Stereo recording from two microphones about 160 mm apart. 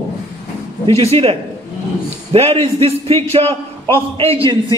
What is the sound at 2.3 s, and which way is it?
A man's voice, 40° right (ahead or behind).